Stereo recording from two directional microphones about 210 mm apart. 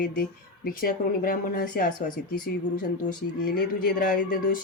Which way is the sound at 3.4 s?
40° left (ahead or behind).